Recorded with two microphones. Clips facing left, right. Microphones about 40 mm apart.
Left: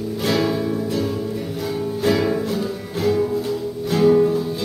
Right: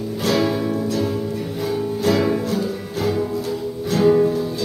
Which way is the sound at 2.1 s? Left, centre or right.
Centre.